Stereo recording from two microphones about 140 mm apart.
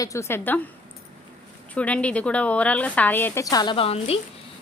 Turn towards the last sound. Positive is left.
turn(degrees=45)  # may be behind; listen again after turning